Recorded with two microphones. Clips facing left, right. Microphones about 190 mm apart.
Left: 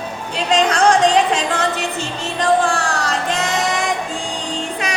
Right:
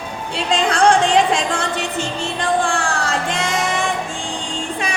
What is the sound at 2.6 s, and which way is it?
Music, 40° left (ahead or behind).